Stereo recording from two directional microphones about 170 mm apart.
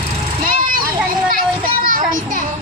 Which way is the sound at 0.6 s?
55° right (ahead or behind).